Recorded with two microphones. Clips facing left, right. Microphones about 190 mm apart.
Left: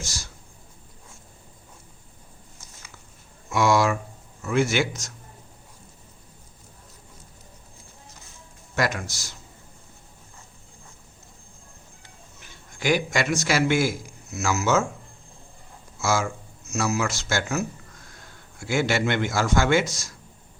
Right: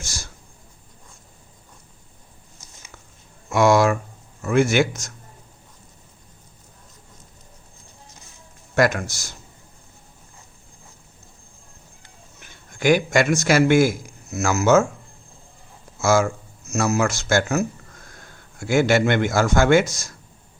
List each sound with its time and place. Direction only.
0.0 s a man's voice: 50° right (ahead or behind)
3.5 s a man's voice: 50° right (ahead or behind)
8.7 s a man's voice: 55° right (ahead or behind)
12.4 s a man's voice: 50° right (ahead or behind)
16.0 s a man's voice: 50° right (ahead or behind)